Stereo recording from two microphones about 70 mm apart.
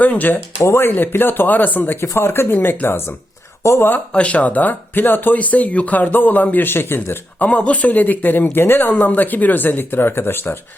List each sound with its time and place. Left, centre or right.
0.0 s speech: left
0.6 s speech: left
0.9 s speech: left
3.6 s speech: left
4.1 s speech: centre; by 7.2 s left
7.3 s speech: centre